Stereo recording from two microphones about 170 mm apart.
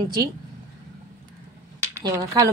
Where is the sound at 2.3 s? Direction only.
25° right (ahead or behind).